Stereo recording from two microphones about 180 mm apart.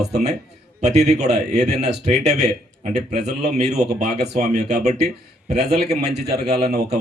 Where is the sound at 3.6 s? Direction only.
35° right (ahead or behind).